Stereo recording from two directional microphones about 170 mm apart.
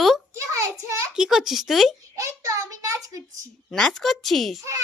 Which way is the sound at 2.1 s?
20° right (ahead or behind).